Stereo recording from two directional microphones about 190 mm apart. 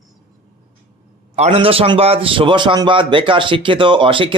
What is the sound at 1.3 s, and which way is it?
A man's voice, 35° right (ahead or behind).